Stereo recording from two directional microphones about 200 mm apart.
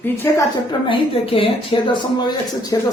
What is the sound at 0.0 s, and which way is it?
A woman's voice, 15° left (ahead or behind).